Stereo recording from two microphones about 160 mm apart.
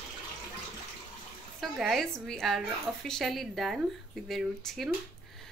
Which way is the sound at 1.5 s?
Centre (ahead or behind).